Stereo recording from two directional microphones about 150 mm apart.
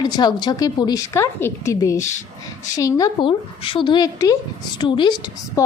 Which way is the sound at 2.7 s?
20° left (ahead or behind).